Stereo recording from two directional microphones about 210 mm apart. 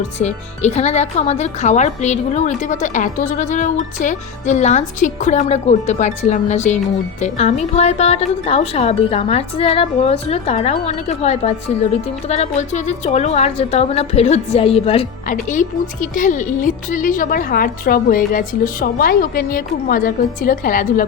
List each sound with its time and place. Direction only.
0.2 s a woman's voice: 35° left (ahead or behind)